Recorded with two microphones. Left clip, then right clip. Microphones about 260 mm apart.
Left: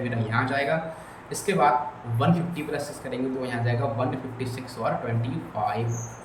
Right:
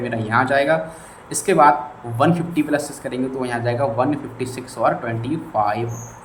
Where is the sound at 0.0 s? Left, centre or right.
Centre.